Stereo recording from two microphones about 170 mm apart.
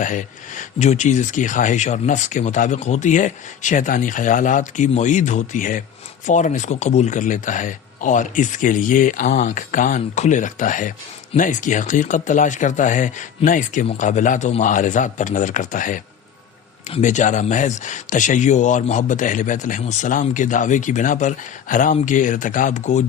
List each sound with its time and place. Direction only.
0.0 s speech: 50° left (ahead or behind)